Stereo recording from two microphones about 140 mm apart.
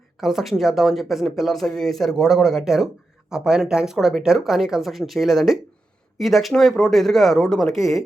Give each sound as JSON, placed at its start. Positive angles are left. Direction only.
{"t": 0.2, "sound": "speech", "side_deg": 0}